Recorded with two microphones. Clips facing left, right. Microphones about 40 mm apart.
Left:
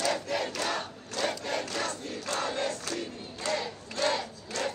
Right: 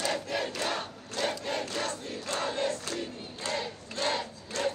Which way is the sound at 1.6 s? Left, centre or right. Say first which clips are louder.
Even; right.